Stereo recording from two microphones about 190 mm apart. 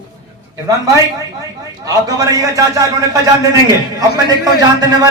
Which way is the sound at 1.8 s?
20° right (ahead or behind).